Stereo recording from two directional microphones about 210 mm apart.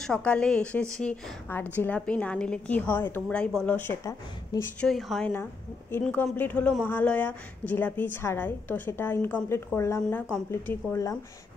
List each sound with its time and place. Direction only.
0.0 s a woman's voice: 5° left (ahead or behind)
4.8 s a woman's voice: centre (ahead or behind)